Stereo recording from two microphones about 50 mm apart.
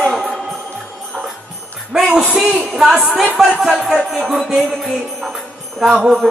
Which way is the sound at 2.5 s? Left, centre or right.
Centre.